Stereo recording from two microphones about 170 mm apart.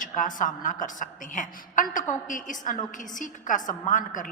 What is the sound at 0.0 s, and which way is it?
A woman's voice, 50° left (ahead or behind).